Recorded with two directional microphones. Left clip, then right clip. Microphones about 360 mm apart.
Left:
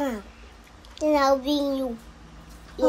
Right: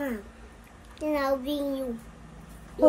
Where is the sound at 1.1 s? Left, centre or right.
Centre.